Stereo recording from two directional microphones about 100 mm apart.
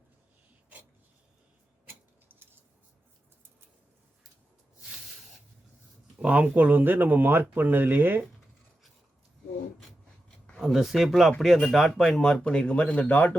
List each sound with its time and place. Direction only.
2.3 s scissors: 20° right (ahead or behind)
6.1 s speech: 10° right (ahead or behind)
10.6 s speech: 5° right (ahead or behind); by 13.3 s 15° left (ahead or behind)